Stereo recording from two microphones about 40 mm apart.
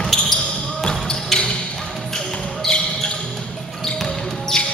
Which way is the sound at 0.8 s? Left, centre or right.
Centre.